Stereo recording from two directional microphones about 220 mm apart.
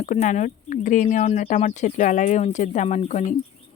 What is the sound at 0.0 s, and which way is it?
Speech, 35° left (ahead or behind).